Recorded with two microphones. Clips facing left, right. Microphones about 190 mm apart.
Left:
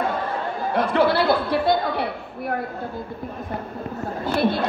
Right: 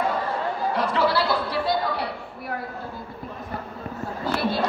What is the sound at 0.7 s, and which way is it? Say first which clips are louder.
Music: left 5 dB; 55° left (ahead or behind).